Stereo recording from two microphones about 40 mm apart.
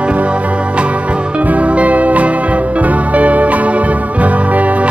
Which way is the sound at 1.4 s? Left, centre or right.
Right.